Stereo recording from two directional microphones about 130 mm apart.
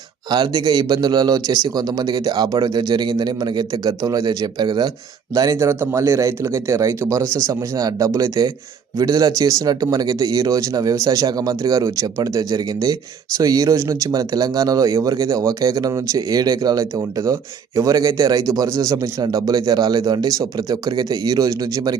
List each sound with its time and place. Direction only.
0.3 s speech: 35° right (ahead or behind)